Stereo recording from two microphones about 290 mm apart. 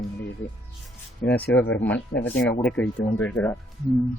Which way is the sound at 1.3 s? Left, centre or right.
Centre.